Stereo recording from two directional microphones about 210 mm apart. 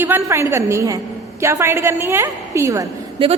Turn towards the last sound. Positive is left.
turn(degrees=-15)  # may be behind; listen again after turning